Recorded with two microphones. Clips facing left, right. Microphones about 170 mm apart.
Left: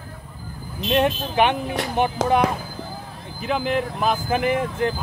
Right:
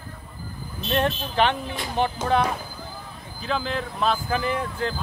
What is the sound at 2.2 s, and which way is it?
Speech, 90° left.